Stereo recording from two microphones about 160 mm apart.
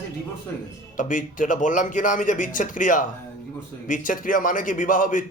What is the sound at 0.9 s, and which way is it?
Speech, 55° left (ahead or behind).